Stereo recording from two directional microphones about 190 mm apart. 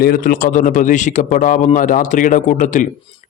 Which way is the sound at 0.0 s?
50° left (ahead or behind).